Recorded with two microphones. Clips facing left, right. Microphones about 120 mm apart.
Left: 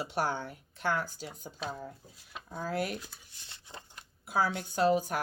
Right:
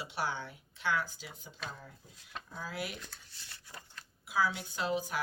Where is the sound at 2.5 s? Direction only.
45° left (ahead or behind).